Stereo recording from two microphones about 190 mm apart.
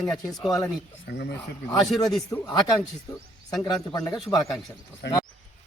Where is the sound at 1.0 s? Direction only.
60° left (ahead or behind).